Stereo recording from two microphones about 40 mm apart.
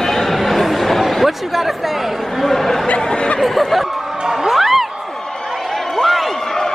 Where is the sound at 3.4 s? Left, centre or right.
Centre.